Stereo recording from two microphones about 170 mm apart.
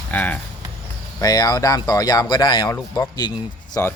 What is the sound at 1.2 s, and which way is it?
Speech, 20° left (ahead or behind).